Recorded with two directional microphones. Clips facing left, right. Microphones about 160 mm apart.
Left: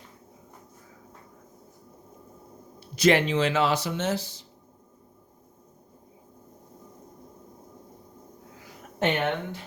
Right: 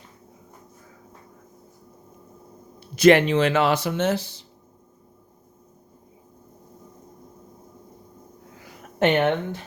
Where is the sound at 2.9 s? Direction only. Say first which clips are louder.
Right 6 dB; 60° right (ahead or behind).